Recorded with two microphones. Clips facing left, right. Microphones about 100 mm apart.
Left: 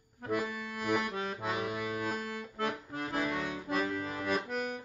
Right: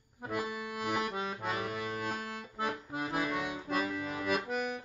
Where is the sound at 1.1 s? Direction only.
10° right (ahead or behind).